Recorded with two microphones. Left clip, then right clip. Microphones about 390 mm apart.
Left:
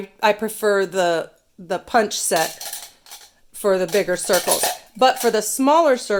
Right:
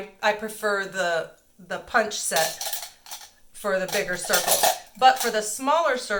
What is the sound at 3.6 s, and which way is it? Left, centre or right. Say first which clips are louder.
Speech: left 6 dB; left.